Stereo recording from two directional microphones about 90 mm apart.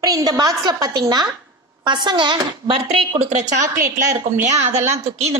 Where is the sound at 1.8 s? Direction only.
60° right (ahead or behind).